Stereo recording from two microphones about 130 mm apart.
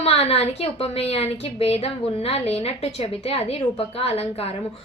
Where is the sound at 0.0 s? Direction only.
50° left (ahead or behind).